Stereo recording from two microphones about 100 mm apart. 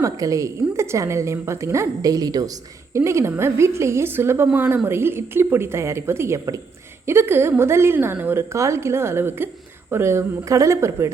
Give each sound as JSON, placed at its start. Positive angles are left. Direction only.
{"t": 0.0, "sound": "a woman's voice", "side_deg": -35}